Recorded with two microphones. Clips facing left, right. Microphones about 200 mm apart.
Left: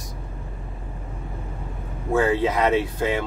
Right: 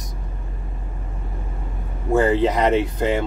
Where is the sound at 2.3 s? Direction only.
15° right (ahead or behind).